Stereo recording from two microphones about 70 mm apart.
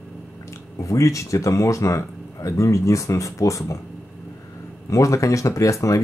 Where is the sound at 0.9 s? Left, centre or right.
Left.